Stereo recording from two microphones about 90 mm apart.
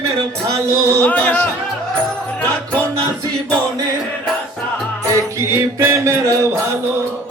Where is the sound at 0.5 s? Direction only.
35° right (ahead or behind).